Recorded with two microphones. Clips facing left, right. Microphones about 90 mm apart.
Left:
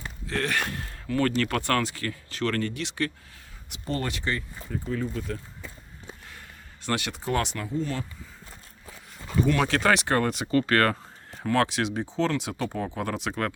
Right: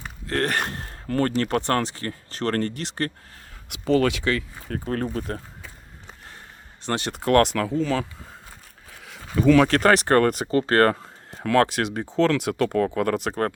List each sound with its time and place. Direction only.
0.3 s speech: 50° right (ahead or behind)
1.4 s speech: 30° right (ahead or behind)
3.7 s speech: 90° right; by 5.4 s 55° right (ahead or behind)
6.8 s speech: 30° right (ahead or behind)
7.1 s speech: 65° right (ahead or behind); by 8.0 s 90° right
9.0 s a sound: 90° right
9.6 s speech: 50° right (ahead or behind)
11.5 s speech: 45° right (ahead or behind)